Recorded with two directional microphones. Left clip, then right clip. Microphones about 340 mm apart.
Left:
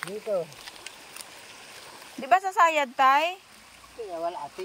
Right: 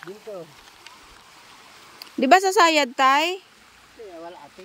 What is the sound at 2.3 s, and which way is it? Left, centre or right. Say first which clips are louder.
Speech: right 5 dB; centre.